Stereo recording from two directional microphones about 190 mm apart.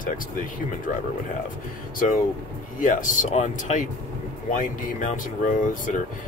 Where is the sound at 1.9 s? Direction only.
45° left (ahead or behind).